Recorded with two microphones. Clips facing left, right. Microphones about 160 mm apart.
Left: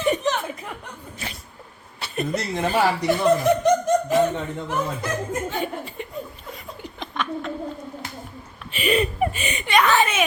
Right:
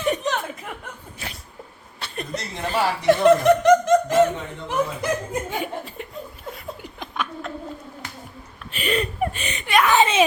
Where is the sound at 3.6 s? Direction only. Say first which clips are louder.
Right 3 dB; 90° right.